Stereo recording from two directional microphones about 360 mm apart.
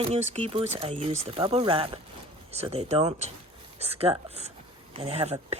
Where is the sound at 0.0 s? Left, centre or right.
Centre.